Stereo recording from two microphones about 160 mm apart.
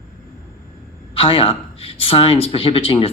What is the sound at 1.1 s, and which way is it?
Speech, 35° left (ahead or behind).